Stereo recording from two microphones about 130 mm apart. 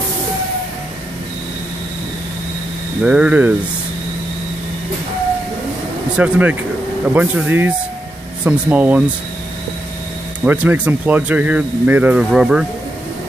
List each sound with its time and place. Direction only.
3.0 s speech: 10° right (ahead or behind)
6.1 s speech: 10° right (ahead or behind)
10.4 s speech: 10° right (ahead or behind)